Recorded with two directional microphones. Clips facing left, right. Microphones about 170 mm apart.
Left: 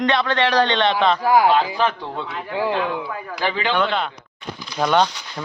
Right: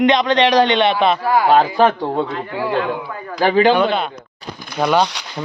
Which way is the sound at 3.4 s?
40° right (ahead or behind).